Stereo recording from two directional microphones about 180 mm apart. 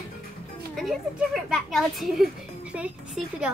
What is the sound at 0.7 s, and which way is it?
A woman's voice, centre (ahead or behind).